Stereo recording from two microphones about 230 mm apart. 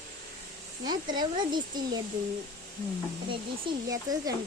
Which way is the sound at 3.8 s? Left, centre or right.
Centre.